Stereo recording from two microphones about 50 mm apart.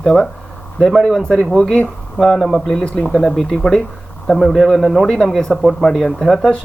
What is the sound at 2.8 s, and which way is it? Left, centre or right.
Speech, left.